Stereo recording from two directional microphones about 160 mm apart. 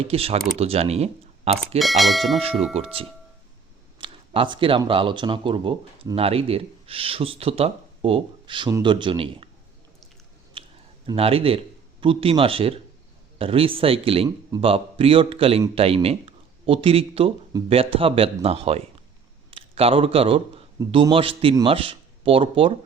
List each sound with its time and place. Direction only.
0.0 s speech: 35° right (ahead or behind)
1.8 s speech: centre (ahead or behind)
2.7 s speech: 35° right (ahead or behind)
4.0 s a sound: 30° right (ahead or behind)
4.9 s speech: 30° right (ahead or behind)
10.6 s clicking: 30° right (ahead or behind)
11.0 s speech: 35° right (ahead or behind)